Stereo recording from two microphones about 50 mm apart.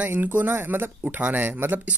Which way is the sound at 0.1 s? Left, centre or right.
Right.